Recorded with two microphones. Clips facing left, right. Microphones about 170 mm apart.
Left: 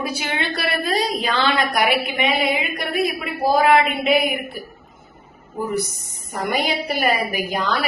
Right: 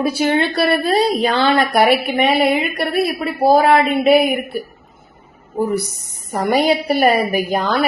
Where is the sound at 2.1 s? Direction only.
45° right (ahead or behind).